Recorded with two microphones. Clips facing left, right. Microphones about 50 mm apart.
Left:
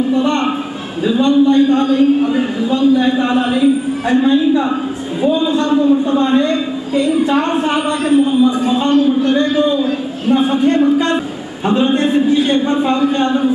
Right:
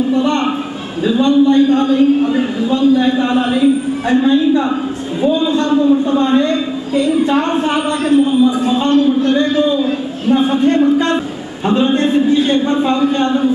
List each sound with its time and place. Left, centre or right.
0.1 s a man's voice: centre